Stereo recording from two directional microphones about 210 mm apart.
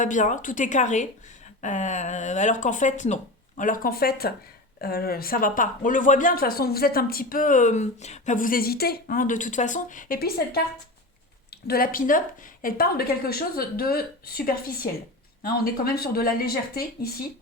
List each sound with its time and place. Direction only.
0.0 s speech: 35° left (ahead or behind)